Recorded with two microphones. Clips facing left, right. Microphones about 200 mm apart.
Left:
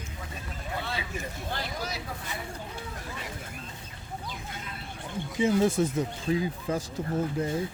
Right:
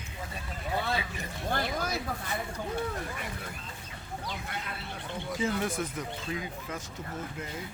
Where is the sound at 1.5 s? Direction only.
50° right (ahead or behind).